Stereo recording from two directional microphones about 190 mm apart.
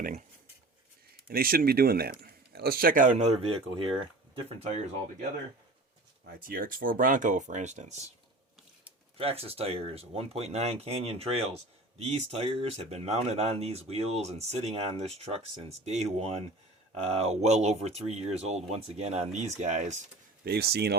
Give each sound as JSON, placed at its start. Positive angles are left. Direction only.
{"t": 0.0, "sound": "speech", "side_deg": -40}
{"t": 1.3, "sound": "speech", "side_deg": -50}
{"t": 6.5, "sound": "speech", "side_deg": -50}
{"t": 9.1, "sound": "speech", "side_deg": -30}
{"t": 20.4, "sound": "speech", "side_deg": -55}